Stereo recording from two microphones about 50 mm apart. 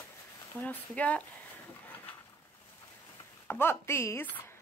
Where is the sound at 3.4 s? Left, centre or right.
Left.